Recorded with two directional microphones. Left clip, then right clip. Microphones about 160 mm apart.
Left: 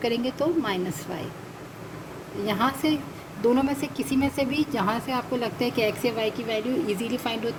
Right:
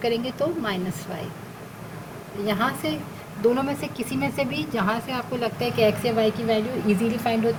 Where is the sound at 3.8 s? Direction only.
55° left (ahead or behind).